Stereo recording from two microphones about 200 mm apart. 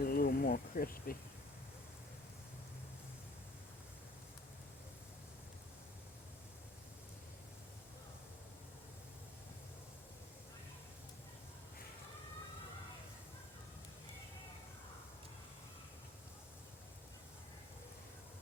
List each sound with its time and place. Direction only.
0.0 s insect: 50° left (ahead or behind)